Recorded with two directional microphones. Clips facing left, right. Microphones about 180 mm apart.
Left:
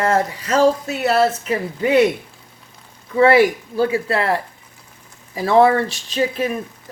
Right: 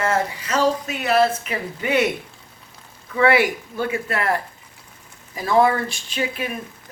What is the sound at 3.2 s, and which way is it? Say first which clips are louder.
Speech: left 5 dB; 35° left (ahead or behind).